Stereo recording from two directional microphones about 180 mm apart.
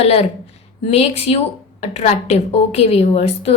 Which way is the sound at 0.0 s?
35° left (ahead or behind).